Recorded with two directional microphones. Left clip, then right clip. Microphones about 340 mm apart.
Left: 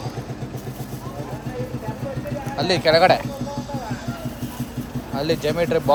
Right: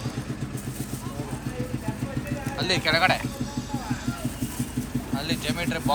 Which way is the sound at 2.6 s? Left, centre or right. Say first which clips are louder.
Left 6 dB; centre.